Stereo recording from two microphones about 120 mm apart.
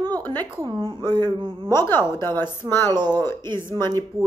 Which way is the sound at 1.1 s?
35° right (ahead or behind).